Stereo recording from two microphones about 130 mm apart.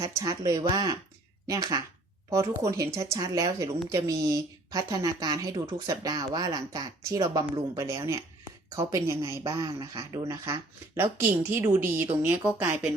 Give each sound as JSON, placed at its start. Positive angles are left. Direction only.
{"t": 0.3, "sound": "speech", "side_deg": -25}